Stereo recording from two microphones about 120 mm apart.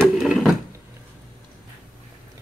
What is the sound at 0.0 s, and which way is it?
Wood, 5° right (ahead or behind).